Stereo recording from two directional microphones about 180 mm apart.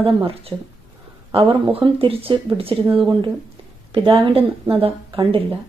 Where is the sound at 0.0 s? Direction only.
30° right (ahead or behind).